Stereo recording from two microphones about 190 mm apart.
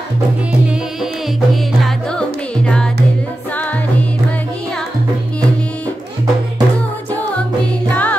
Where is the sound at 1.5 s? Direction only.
Centre (ahead or behind).